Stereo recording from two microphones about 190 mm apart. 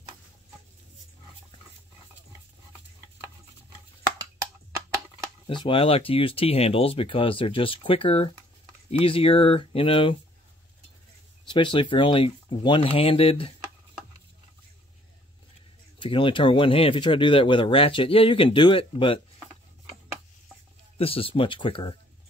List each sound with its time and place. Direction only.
5.5 s speech: 25° left (ahead or behind)
11.4 s speech: 25° left (ahead or behind)
16.0 s speech: 25° left (ahead or behind)
21.0 s speech: 30° left (ahead or behind)